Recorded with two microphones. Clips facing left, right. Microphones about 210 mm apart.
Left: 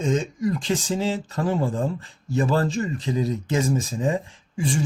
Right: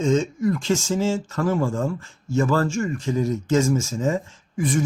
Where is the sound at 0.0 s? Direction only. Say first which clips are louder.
Right 3 dB; 15° left (ahead or behind).